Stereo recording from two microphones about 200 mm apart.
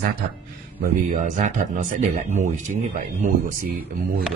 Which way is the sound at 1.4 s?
35° right (ahead or behind).